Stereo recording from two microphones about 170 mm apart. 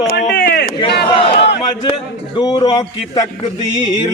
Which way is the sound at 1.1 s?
35° left (ahead or behind).